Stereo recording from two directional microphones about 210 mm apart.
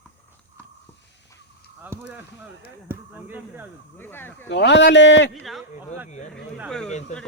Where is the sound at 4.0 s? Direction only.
10° left (ahead or behind).